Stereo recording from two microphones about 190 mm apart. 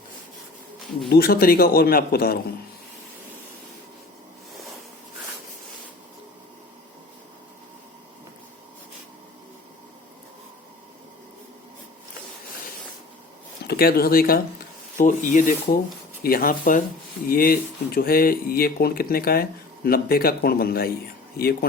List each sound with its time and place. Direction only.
1.1 s speech: 55° left (ahead or behind)
13.7 s speech: 55° left (ahead or behind)